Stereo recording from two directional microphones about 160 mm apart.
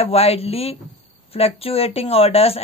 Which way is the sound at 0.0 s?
40° left (ahead or behind).